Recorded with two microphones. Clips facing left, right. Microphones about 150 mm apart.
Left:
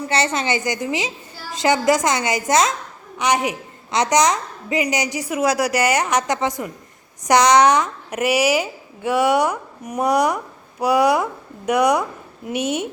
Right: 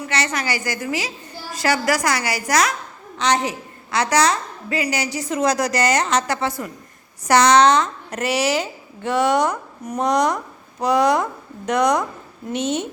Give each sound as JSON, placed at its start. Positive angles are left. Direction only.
{"t": 0.1, "sound": "a woman's voice", "side_deg": 25}
{"t": 3.2, "sound": "a woman's voice", "side_deg": 10}